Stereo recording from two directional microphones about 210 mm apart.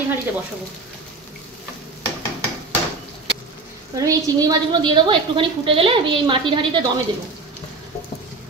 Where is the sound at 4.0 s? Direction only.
15° right (ahead or behind).